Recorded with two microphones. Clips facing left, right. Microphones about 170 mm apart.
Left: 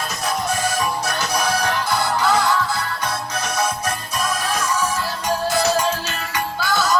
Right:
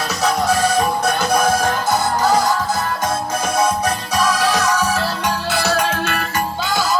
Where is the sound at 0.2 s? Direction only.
70° right (ahead or behind); by 2.6 s 40° right (ahead or behind).